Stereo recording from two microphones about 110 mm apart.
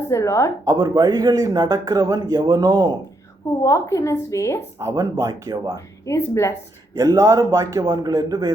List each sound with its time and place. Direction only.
0.1 s a woman's voice: 25° left (ahead or behind)
0.7 s speech: 35° right (ahead or behind)
3.6 s a woman's voice: 30° left (ahead or behind)
4.8 s speech: 30° right (ahead or behind)
5.7 s a woman's voice: 25° left (ahead or behind)
6.9 s speech: 30° right (ahead or behind)